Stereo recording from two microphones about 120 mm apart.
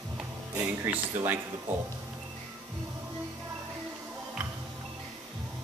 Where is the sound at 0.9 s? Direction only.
15° right (ahead or behind).